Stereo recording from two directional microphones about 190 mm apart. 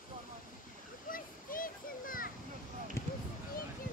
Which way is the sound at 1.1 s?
45° left (ahead or behind).